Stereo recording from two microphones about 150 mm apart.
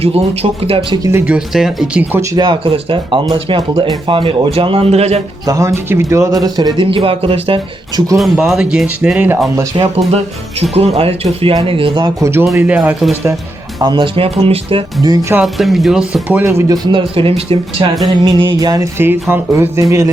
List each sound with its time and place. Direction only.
0.6 s speech: 40° right (ahead or behind)
1.0 s speech: 10° right (ahead or behind)
2.3 s speech: 30° right (ahead or behind); by 5.2 s 45° right (ahead or behind)
5.5 s speech: 20° right (ahead or behind); by 8.0 s 35° right (ahead or behind)
8.2 s speech: centre (ahead or behind)
9.7 s speech: 40° right (ahead or behind)
12.2 s speech: 15° right (ahead or behind)
13.7 s speech: 30° right (ahead or behind)
15.0 s speech: 20° right (ahead or behind)
15.5 s speech: centre (ahead or behind)
16.4 s speech: 15° right (ahead or behind); by 17.8 s 40° right (ahead or behind)
18.2 s speech: 30° right (ahead or behind)